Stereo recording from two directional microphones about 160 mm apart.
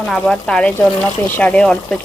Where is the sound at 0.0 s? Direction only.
5° left (ahead or behind).